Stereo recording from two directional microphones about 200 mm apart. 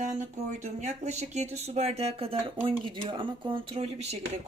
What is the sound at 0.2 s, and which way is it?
Speech, 35° right (ahead or behind).